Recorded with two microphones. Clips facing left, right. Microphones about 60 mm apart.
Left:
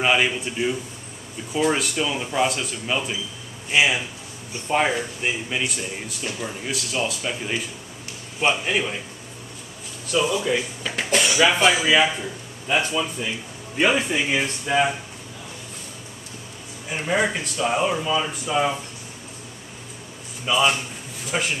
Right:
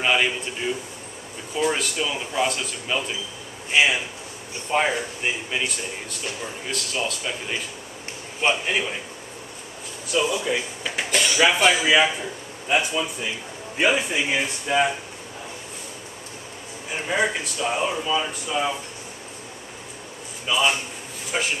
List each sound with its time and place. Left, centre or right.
0.0 s a sound: centre
0.6 s speech: centre
8.6 s speech: centre
10.3 s speech: centre
16.9 s speech: centre
20.4 s speech: centre